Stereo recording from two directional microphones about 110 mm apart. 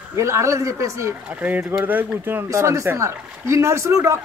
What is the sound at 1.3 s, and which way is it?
A woman's voice, 15° right (ahead or behind).